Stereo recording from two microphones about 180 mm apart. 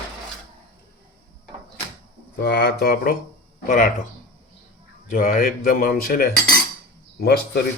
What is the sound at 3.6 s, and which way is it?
Speech, 50° left (ahead or behind).